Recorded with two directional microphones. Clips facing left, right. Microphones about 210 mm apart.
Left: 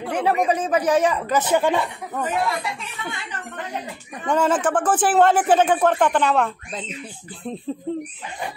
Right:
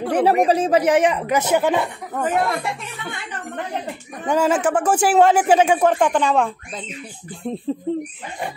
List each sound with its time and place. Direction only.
0.0 s speech: 40° right (ahead or behind); by 2.2 s 5° right (ahead or behind)
2.2 s speech: 50° right (ahead or behind)
4.3 s speech: 10° right (ahead or behind)